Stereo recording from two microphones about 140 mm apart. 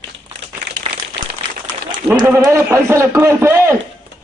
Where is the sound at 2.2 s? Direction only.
15° right (ahead or behind).